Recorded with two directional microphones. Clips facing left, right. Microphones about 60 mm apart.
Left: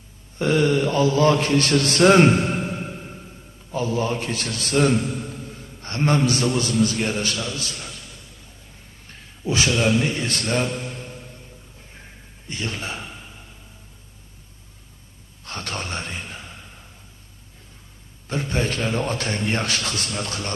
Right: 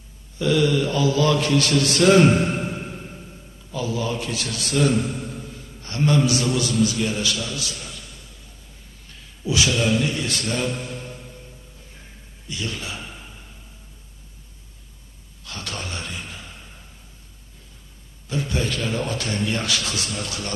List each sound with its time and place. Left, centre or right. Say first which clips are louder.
0.4 s a man's voice: left 1 dB; left
3.7 s a man's voice: left 2 dB; left
9.0 s a man's voice: left 1 dB; left
12.4 s a man's voice: left 1 dB; left
15.4 s speech: left 2 dB; left
18.2 s a man's voice: left 1 dB; left